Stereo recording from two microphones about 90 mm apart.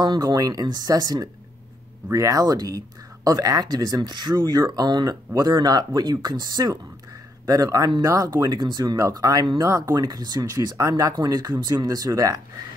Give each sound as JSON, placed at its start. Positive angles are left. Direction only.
{"t": 0.0, "sound": "speech", "side_deg": -50}
{"t": 9.0, "sound": "speech", "side_deg": -40}